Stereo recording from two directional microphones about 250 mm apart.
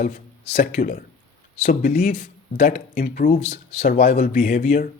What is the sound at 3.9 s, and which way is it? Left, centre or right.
Speech, left.